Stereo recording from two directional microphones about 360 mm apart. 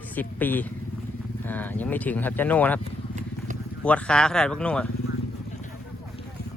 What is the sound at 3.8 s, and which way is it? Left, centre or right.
Speech, centre.